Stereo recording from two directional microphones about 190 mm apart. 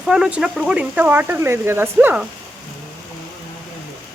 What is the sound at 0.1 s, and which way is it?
Speech, 5° right (ahead or behind).